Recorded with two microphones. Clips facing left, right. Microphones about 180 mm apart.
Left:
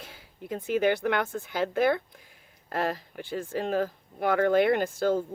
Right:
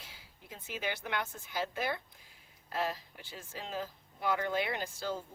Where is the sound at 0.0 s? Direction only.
55° left (ahead or behind).